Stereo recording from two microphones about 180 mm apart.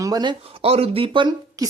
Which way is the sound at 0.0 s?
20° right (ahead or behind).